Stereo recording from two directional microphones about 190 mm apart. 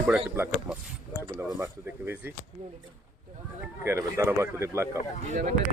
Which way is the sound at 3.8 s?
15° right (ahead or behind).